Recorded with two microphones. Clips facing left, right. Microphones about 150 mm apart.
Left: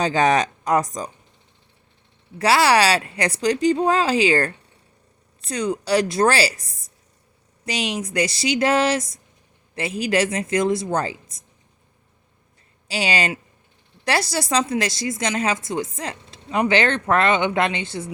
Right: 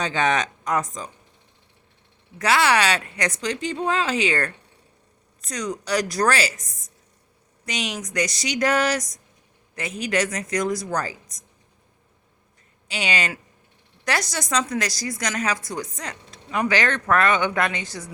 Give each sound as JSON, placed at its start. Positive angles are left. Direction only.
{"t": 0.0, "sound": "speech", "side_deg": 35}
{"t": 2.4, "sound": "speech", "side_deg": 35}
{"t": 12.9, "sound": "speech", "side_deg": 35}